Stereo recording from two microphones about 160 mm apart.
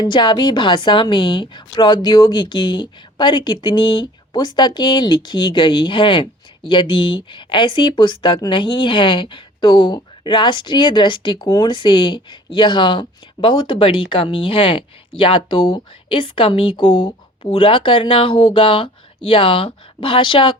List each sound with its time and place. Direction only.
0.0 s a woman's voice: 30° left (ahead or behind)